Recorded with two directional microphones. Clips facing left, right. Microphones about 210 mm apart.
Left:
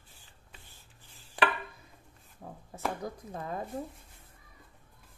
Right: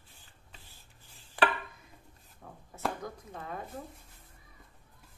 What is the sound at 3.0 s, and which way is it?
Speech, 35° left (ahead or behind).